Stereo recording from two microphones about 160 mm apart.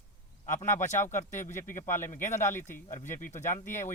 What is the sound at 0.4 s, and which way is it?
Speech, 50° left (ahead or behind).